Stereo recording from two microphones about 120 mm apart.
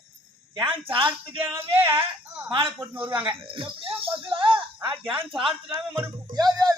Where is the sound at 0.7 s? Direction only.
50° right (ahead or behind).